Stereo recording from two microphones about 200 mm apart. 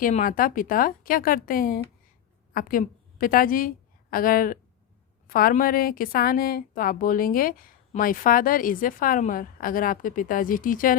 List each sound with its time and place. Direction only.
0.0 s a woman's voice: 40° left (ahead or behind)